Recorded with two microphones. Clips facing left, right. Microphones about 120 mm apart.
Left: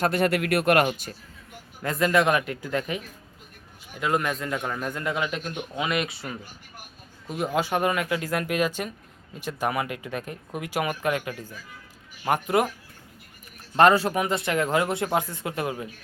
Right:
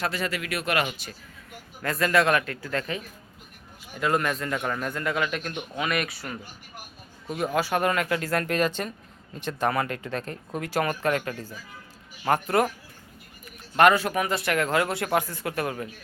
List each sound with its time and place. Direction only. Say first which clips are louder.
0.0 s speech: left 6 dB; 55° left (ahead or behind)
1.8 s speech: left 1 dB; 20° left (ahead or behind)
4.0 s speech: even; 10° left (ahead or behind)
7.3 s speech: even; 15° left (ahead or behind)
13.7 s speech: left 1 dB; 30° left (ahead or behind)